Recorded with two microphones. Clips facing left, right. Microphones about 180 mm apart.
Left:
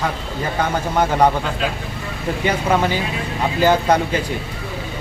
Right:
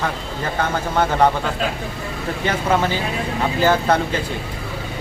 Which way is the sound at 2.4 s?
15° left (ahead or behind).